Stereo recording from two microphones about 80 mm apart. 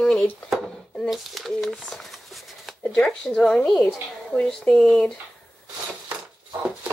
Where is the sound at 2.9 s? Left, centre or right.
Centre.